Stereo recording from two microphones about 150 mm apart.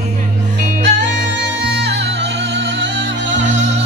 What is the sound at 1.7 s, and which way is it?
Music, 90° right.